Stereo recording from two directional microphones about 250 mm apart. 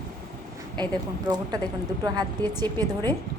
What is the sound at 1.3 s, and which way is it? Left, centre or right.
Speech, centre.